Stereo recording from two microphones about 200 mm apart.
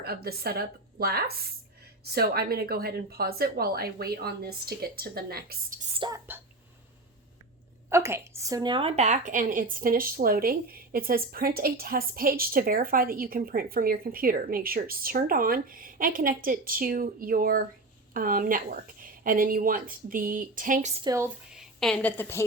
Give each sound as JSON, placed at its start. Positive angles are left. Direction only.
{"t": 0.0, "sound": "a woman's voice", "side_deg": -50}
{"t": 6.0, "sound": "speech", "side_deg": -15}
{"t": 7.9, "sound": "a woman's voice", "side_deg": -15}
{"t": 21.0, "sound": "speech", "side_deg": -15}
{"t": 21.5, "sound": "a woman's voice", "side_deg": 0}